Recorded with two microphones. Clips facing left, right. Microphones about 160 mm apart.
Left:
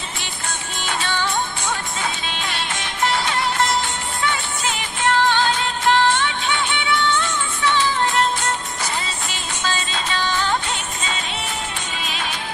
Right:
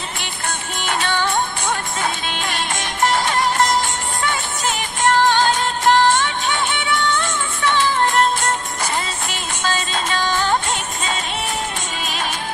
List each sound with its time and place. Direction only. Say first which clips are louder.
0.2 s music: right 3 dB; 55° right (ahead or behind)